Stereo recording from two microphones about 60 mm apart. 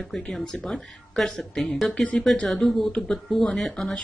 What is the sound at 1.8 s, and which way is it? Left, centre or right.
Speech, centre.